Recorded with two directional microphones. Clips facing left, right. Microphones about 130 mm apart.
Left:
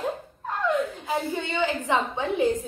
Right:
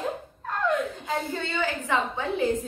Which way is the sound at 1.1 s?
15° left (ahead or behind).